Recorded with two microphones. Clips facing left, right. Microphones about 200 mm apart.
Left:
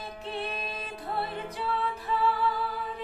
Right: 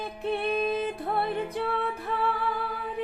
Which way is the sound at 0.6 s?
55° right (ahead or behind).